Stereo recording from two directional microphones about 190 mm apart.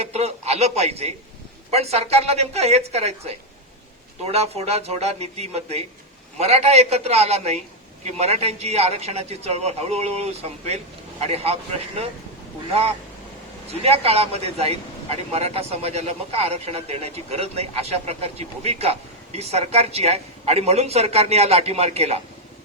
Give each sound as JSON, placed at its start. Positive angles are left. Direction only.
{"t": 0.0, "sound": "speech", "side_deg": -35}
{"t": 13.8, "sound": "speech", "side_deg": -30}